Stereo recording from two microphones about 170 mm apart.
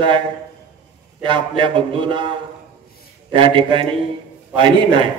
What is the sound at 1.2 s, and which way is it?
A man's voice, 30° right (ahead or behind).